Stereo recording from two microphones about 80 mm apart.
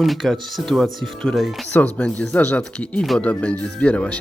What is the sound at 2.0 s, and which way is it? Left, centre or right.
Speech, centre.